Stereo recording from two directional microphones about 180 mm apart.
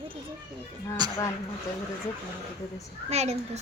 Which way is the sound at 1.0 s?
25° right (ahead or behind).